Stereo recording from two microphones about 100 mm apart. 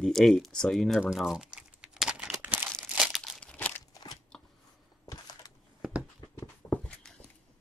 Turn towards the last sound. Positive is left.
turn(degrees=25)  # may be behind; listen again after turning